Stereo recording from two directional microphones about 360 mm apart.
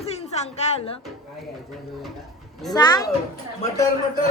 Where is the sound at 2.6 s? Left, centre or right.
Centre.